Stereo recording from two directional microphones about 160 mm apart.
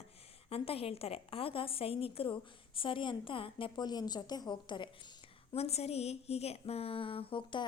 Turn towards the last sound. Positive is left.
turn(degrees=35)  # may be behind; listen again after turning